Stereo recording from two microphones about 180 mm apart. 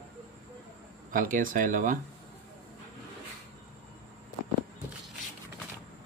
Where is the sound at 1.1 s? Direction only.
50° right (ahead or behind).